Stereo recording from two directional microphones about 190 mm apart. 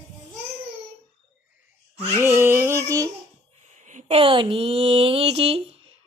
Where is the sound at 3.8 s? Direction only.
40° right (ahead or behind).